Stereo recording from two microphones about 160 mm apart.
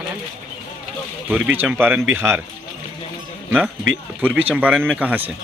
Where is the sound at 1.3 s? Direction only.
10° right (ahead or behind).